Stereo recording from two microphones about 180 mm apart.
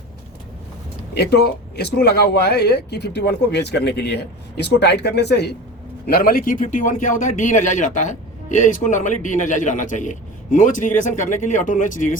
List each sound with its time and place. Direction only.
1.1 s a man's voice: 65° left (ahead or behind)
6.1 s a man's voice: 55° left (ahead or behind)